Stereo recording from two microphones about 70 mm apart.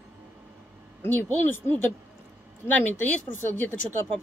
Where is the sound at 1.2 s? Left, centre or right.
Left.